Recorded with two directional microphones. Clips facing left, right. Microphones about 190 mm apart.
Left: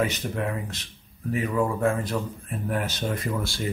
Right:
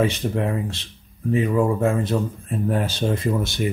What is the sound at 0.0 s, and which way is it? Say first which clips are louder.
Speech: right 5 dB; 30° right (ahead or behind).